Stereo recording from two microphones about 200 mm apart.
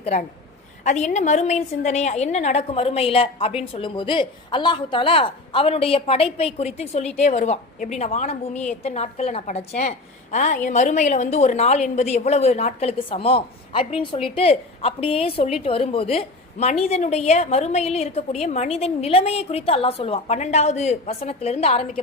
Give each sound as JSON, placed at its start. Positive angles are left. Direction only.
{"t": 0.0, "sound": "a woman's voice", "side_deg": 35}